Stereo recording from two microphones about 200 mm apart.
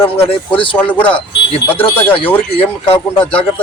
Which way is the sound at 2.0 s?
10° left (ahead or behind).